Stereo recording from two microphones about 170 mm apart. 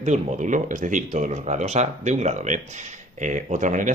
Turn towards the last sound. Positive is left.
turn(degrees=-45)  # may be behind; listen again after turning